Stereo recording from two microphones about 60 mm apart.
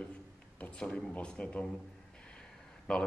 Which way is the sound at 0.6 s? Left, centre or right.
Centre.